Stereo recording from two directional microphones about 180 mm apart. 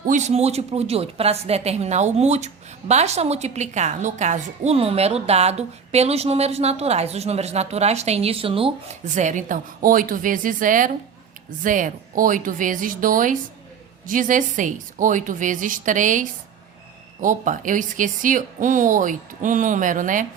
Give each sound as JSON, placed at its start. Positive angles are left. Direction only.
{"t": 0.1, "sound": "a woman's voice", "side_deg": -40}
{"t": 9.0, "sound": "speech", "side_deg": -45}